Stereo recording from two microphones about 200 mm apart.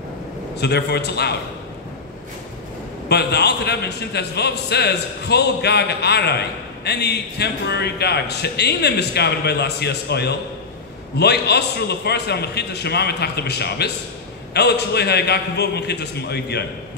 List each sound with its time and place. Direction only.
0.6 s a man's voice: 55° left (ahead or behind)
3.1 s a man's voice: 55° left (ahead or behind)